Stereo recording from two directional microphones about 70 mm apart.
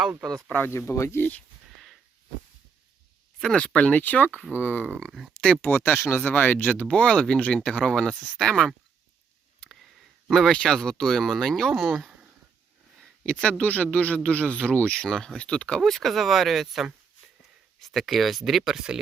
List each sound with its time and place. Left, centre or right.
0.3 s speech: centre
0.7 s speech: left
3.4 s speech: centre
4.0 s speech: left
5.3 s speech: centre
5.6 s speech: left; by 8.7 s centre
10.2 s speech: centre
13.4 s speech: centre
15.8 s speech: centre